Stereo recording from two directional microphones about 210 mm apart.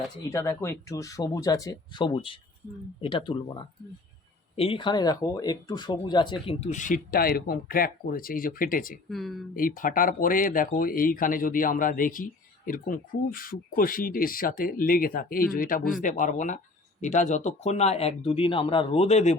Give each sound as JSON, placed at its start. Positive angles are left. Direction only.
{"t": 0.3, "sound": "speech", "side_deg": 15}
{"t": 4.5, "sound": "speech", "side_deg": 25}
{"t": 9.0, "sound": "speech", "side_deg": 0}
{"t": 9.6, "sound": "speech", "side_deg": 40}